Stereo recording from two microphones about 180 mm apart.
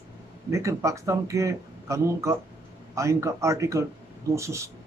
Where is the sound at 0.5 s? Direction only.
15° right (ahead or behind).